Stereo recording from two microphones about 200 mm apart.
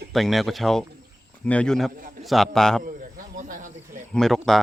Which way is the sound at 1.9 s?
45° right (ahead or behind).